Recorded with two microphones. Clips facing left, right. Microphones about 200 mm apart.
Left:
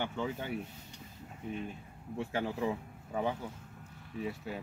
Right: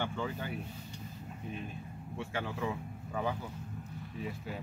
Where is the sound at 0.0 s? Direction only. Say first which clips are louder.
Left 1 dB; 20° left (ahead or behind).